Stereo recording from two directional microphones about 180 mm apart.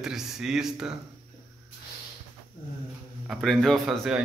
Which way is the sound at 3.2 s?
Centre (ahead or behind).